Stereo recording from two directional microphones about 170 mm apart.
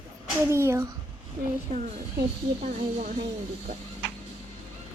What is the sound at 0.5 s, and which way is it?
Speech, 15° right (ahead or behind).